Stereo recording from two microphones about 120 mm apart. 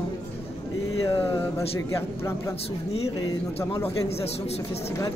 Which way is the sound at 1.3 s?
20° left (ahead or behind).